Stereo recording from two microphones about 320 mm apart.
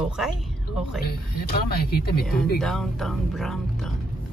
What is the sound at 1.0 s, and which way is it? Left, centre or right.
Speech, left.